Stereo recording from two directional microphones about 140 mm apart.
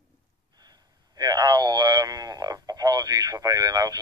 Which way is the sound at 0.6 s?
30° right (ahead or behind).